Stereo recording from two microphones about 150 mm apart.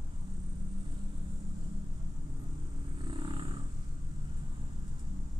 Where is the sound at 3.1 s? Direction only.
35° right (ahead or behind).